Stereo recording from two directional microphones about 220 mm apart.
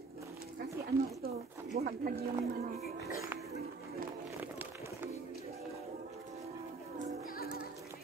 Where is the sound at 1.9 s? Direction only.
40° right (ahead or behind).